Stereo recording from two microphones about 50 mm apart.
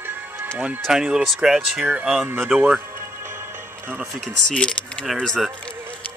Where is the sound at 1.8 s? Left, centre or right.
Right.